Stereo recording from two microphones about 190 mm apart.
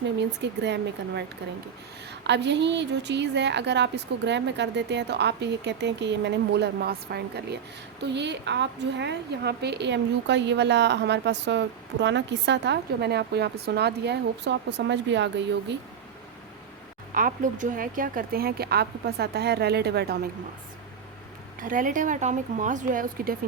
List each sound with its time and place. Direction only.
0.2 s a woman's voice: 65° right (ahead or behind)
2.2 s a woman's voice: 65° right (ahead or behind)
17.2 s a woman's voice: 45° right (ahead or behind)
21.6 s speech: 45° right (ahead or behind)